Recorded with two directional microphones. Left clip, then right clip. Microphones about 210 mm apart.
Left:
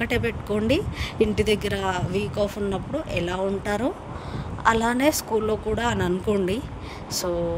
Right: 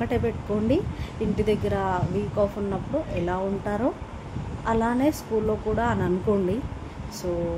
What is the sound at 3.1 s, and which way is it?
Speech, 45° left (ahead or behind).